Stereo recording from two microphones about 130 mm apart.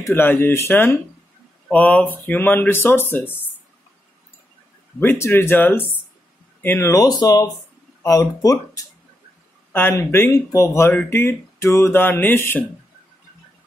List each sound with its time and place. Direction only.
0.0 s speech: 15° left (ahead or behind)
5.0 s speech: 20° left (ahead or behind)